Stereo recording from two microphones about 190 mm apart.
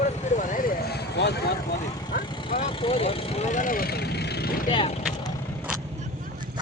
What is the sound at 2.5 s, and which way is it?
Speech, 30° left (ahead or behind).